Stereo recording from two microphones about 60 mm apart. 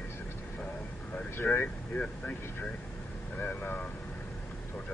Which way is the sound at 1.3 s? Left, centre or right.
Left.